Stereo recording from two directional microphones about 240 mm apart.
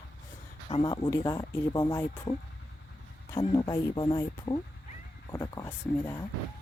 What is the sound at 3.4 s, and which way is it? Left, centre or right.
Speech, centre.